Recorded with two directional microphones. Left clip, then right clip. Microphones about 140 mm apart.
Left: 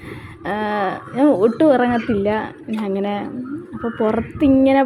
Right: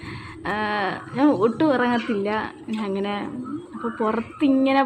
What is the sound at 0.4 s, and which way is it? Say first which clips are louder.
Speech: left 3 dB; 30° left (ahead or behind).